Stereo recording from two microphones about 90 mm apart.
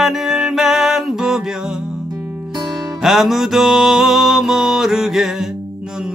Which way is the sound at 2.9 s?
5° right (ahead or behind).